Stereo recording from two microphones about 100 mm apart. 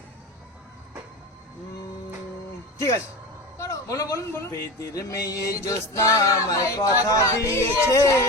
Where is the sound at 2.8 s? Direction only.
30° left (ahead or behind).